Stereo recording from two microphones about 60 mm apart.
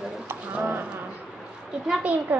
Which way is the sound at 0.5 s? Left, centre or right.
Right.